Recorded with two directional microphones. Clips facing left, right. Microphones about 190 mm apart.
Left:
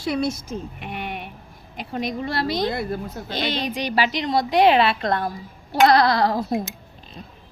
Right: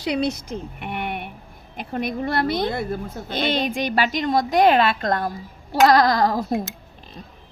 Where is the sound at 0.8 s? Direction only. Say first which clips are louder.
Right 3 dB; 55° right (ahead or behind).